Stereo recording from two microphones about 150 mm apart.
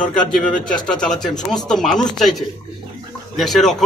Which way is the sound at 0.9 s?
5° left (ahead or behind).